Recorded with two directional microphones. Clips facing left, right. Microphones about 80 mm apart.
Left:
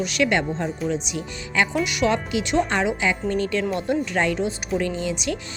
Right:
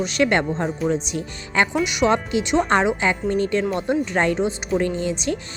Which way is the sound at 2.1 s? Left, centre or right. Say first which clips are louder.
Right 2 dB; right.